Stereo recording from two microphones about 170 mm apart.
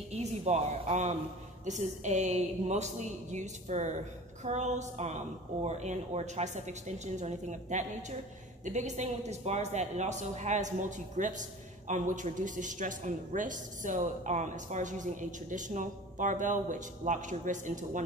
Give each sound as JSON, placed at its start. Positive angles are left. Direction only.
{"t": 0.1, "sound": "speech", "side_deg": -40}